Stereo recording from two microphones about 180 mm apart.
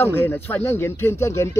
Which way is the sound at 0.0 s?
10° left (ahead or behind).